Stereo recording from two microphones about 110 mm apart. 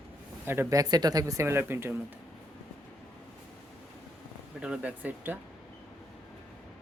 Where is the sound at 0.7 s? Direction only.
40° right (ahead or behind); by 1.9 s 20° right (ahead or behind).